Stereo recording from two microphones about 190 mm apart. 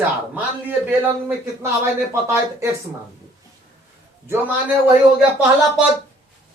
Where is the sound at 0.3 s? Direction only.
10° right (ahead or behind).